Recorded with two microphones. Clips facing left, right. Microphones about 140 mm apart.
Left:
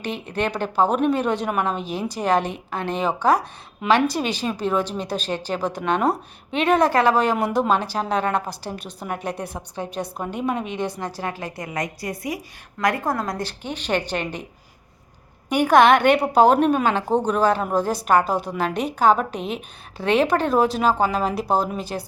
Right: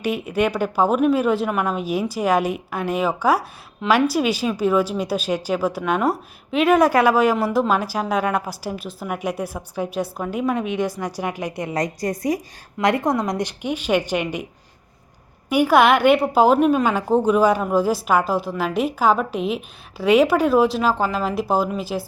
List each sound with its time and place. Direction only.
0.0 s a woman's voice: 10° right (ahead or behind)
11.7 s a woman's voice: 40° right (ahead or behind)
12.8 s a woman's voice: 20° right (ahead or behind)
15.4 s a woman's voice: 5° right (ahead or behind)